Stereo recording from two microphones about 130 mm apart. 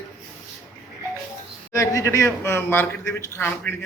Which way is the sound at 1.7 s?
25° left (ahead or behind).